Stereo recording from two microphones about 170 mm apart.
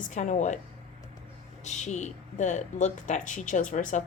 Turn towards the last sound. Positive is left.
turn(degrees=50)  # may be behind; listen again after turning